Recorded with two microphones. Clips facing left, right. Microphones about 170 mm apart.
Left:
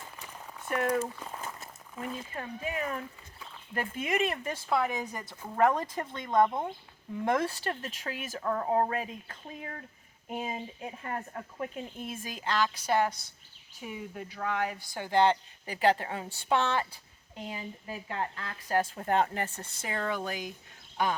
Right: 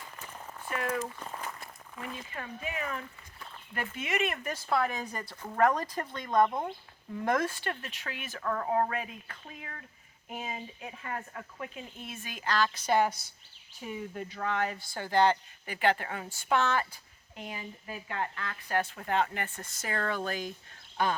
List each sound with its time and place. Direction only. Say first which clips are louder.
0.2 s a sound: right 1 dB; 5° right (ahead or behind)
0.8 s speech: left 4 dB; 35° left (ahead or behind)
1.2 s a sound: even; 5° left (ahead or behind)
2.0 s speech: left 3 dB; 30° left (ahead or behind)
4.8 s speech: even; 15° left (ahead or behind)
6.4 s speech: left 1 dB; centre (ahead or behind)
7.3 s speech: left 1 dB; 30° left (ahead or behind)
8.4 s speech: left 1 dB; 20° left (ahead or behind)
12.5 s speech: right 1 dB; 15° left (ahead or behind); by 19.9 s 30° left (ahead or behind)
19.9 s speech: even; 15° left (ahead or behind)